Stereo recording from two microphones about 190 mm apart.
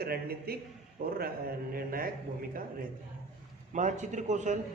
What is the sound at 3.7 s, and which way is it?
Speech, 40° right (ahead or behind).